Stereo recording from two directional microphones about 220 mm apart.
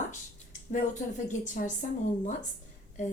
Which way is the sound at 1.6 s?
40° left (ahead or behind).